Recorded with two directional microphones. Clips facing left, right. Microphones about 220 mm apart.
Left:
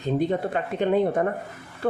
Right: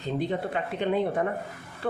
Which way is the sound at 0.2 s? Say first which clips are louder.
Left 4 dB; 45° left (ahead or behind).